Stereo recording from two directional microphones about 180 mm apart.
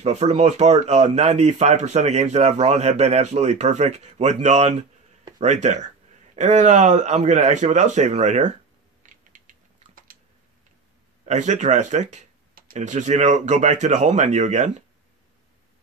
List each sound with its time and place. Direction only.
0.0 s speech: 35° right (ahead or behind)
9.0 s typing: 45° right (ahead or behind)
11.2 s speech: 40° right (ahead or behind)